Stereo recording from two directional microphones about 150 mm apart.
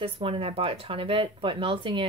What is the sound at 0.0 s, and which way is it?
Speech, 40° right (ahead or behind).